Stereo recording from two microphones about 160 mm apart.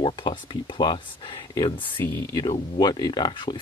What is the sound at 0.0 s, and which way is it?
Speech, 30° left (ahead or behind).